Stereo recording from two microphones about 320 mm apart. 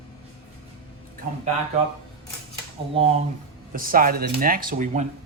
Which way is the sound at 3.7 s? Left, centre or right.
Right.